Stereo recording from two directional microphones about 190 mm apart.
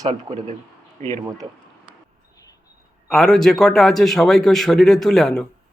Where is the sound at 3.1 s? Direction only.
Centre (ahead or behind).